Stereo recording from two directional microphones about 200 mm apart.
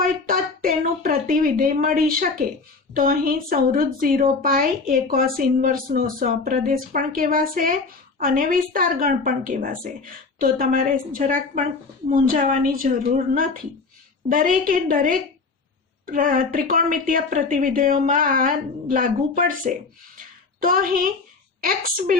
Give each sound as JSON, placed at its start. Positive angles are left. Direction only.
{"t": 0.0, "sound": "a woman's voice", "side_deg": -45}